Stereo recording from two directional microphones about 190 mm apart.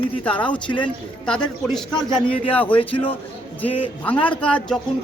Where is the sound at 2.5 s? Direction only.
10° left (ahead or behind).